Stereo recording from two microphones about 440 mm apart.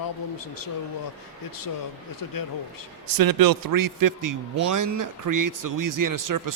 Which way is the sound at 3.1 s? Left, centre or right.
Right.